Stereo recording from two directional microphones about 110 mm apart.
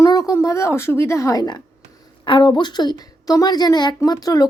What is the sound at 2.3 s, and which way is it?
A woman's voice, 45° left (ahead or behind).